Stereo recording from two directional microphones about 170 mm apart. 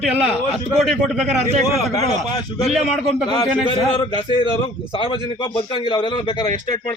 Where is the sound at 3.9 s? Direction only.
30° left (ahead or behind).